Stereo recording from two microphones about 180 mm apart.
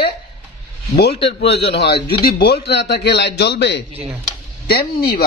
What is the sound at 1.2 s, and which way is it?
A man's voice, 70° left (ahead or behind).